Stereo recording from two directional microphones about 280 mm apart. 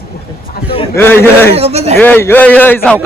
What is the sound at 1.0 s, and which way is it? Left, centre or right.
Speech, centre.